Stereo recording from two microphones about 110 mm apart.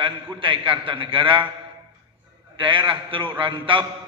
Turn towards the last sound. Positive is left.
turn(degrees=-50)  # may be behind; listen again after turning